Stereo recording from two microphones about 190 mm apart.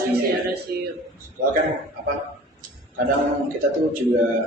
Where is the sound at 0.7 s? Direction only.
55° right (ahead or behind).